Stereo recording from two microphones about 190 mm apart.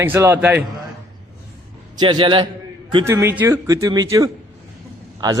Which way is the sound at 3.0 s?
15° right (ahead or behind).